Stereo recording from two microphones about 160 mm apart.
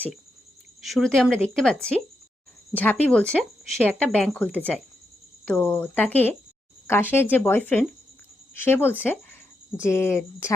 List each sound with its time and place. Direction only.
0.8 s speech: centre (ahead or behind)
2.7 s speech: 10° left (ahead or behind)